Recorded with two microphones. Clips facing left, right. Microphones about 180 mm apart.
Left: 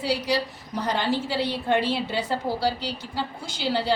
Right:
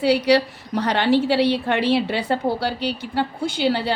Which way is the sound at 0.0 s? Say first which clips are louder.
Right 8 dB; 65° right (ahead or behind).